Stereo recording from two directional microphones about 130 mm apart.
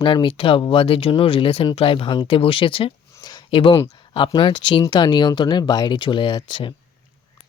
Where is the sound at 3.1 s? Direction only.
30° left (ahead or behind).